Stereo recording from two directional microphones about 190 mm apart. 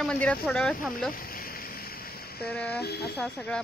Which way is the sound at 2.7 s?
55° left (ahead or behind).